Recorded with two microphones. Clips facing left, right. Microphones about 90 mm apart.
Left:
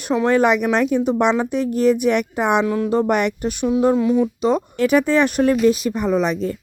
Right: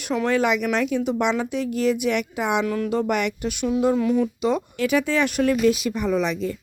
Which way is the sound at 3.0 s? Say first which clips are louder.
Left 4 dB; 45° left (ahead or behind).